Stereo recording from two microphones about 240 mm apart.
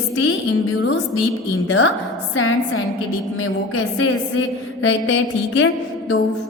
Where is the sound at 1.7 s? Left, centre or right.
Left.